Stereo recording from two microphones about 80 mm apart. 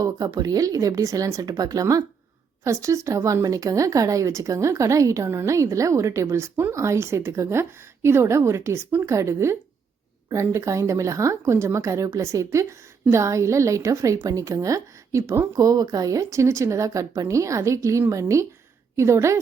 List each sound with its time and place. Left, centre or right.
0.0 s speech: right
15.6 s speech: right